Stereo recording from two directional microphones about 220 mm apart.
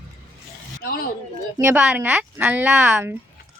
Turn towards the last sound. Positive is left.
turn(degrees=-5)  # may be behind; listen again after turning